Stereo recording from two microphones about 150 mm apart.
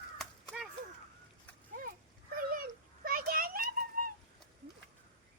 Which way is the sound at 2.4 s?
70° right (ahead or behind).